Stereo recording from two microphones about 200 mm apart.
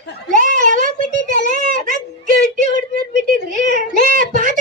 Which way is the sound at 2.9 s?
45° right (ahead or behind).